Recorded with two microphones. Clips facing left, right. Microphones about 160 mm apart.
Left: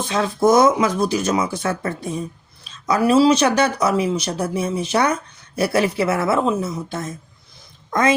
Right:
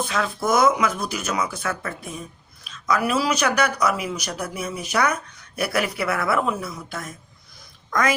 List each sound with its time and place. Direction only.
0.0 s speech: 25° left (ahead or behind)